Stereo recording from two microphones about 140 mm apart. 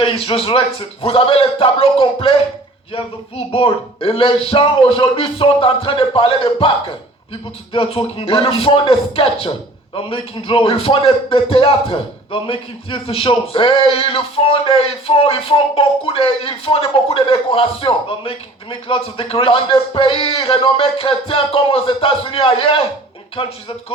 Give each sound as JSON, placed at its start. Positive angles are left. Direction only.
{"t": 0.0, "sound": "speech", "side_deg": 40}